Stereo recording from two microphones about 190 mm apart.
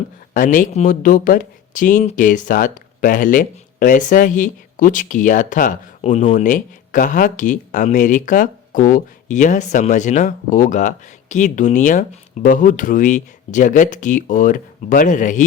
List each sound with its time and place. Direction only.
0.3 s speech: 45° left (ahead or behind)